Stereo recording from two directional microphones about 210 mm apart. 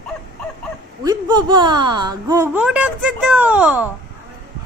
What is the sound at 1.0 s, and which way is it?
Speech, 20° right (ahead or behind).